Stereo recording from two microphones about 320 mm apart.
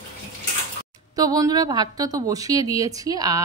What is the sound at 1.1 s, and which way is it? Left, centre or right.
A woman's voice, centre.